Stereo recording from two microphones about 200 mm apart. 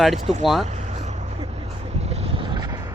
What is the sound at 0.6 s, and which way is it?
Vehicle, 35° right (ahead or behind).